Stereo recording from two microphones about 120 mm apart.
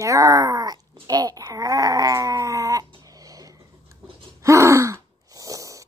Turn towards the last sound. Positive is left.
turn(degrees=-25)  # may be behind; listen again after turning